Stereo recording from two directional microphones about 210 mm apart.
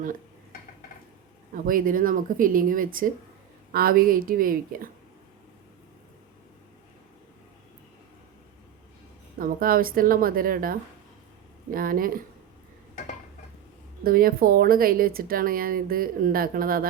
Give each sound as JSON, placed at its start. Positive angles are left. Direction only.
{"t": 1.5, "sound": "a woman's voice", "side_deg": -40}
{"t": 9.4, "sound": "a woman's voice", "side_deg": -45}
{"t": 14.0, "sound": "a woman's voice", "side_deg": -45}